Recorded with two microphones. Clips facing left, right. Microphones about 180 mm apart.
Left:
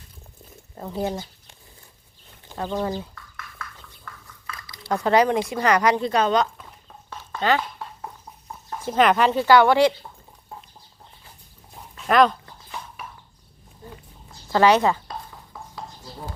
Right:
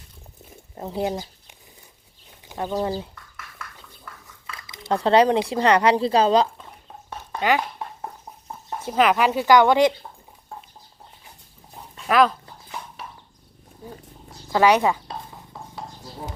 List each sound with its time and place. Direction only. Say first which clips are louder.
0.8 s speech: right 1 dB; 20° right (ahead or behind)
2.5 s a sound: right 1 dB; 15° right (ahead or behind)
2.8 s speech: right 1 dB; 25° right (ahead or behind)
4.5 s a sound: right 2 dB; 25° right (ahead or behind)
5.5 s speech: right 2 dB; 30° right (ahead or behind)
6.8 s a sound: right 4 dB; 15° right (ahead or behind)
8.9 s speech: left 1 dB; 5° right (ahead or behind)
11.9 s speech: left 1 dB; centre (ahead or behind)
13.8 s roaring cats: right 3 dB; 10° right (ahead or behind)
14.5 s speech: even; 10° right (ahead or behind)